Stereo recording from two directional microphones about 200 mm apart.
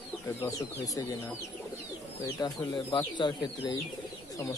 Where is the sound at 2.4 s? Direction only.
20° left (ahead or behind).